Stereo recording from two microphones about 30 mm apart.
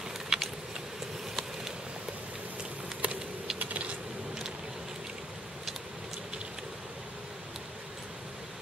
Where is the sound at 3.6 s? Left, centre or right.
Right.